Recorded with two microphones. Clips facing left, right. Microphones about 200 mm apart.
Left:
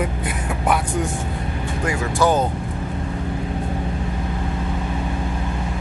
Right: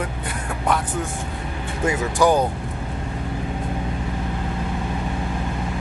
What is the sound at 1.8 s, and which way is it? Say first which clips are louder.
Speech: right 1 dB; 15° right (ahead or behind).